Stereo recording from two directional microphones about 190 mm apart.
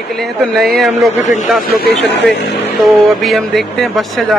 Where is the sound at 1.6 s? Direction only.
60° left (ahead or behind).